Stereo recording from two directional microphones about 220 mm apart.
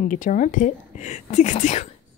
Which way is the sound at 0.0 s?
35° left (ahead or behind).